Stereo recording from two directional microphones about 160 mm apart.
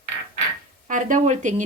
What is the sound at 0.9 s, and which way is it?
Speech, 55° right (ahead or behind).